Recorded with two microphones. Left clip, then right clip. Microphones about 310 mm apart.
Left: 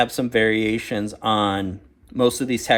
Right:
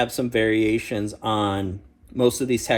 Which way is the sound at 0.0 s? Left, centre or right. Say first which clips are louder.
Left 3 dB; left.